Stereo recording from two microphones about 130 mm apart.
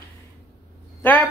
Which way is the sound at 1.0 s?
15° left (ahead or behind).